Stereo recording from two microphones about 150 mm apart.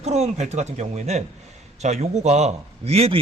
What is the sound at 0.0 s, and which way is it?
A man's voice, 45° right (ahead or behind).